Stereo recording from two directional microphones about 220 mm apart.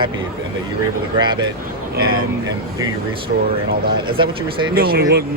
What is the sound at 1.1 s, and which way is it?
Speech, 20° right (ahead or behind).